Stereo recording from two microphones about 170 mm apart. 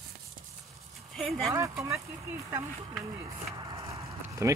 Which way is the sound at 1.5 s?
15° right (ahead or behind).